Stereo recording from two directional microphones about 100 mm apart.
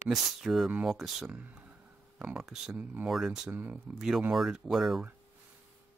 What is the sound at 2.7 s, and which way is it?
Speech, 15° right (ahead or behind).